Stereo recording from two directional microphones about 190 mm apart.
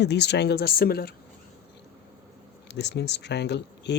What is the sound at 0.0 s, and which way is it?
Speech, 60° left (ahead or behind).